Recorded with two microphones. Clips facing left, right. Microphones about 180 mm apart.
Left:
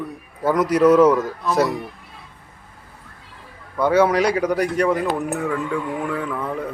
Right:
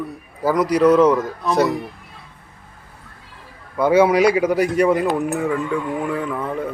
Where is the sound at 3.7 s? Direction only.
10° right (ahead or behind).